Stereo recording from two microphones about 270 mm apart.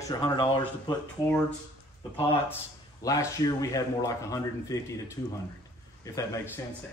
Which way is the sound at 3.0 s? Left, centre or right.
Centre.